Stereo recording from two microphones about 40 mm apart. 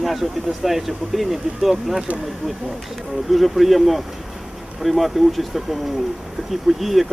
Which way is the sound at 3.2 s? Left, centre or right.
Centre.